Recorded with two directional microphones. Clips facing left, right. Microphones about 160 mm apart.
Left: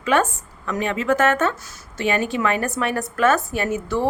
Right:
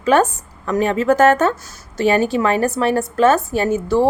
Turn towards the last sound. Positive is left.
turn(degrees=-30)  # may be behind; listen again after turning